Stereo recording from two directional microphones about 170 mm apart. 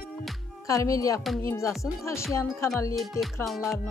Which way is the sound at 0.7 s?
20° left (ahead or behind).